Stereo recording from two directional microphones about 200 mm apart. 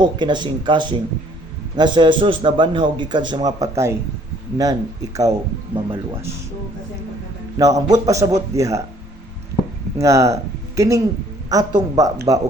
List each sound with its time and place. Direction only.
0.0 s a man's voice: 20° right (ahead or behind)
7.5 s a man's voice: 15° right (ahead or behind)
10.0 s a man's voice: 15° right (ahead or behind)